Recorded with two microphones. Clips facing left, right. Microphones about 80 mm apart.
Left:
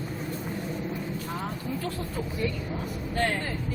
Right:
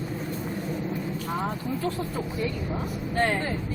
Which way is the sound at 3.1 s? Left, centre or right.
Right.